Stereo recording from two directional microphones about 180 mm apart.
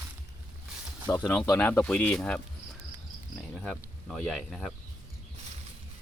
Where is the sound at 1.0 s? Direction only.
10° left (ahead or behind).